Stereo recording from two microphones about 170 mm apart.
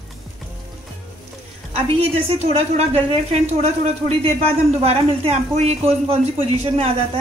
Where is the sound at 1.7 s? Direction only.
35° right (ahead or behind).